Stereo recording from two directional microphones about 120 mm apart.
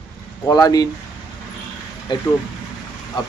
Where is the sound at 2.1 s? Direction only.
40° left (ahead or behind).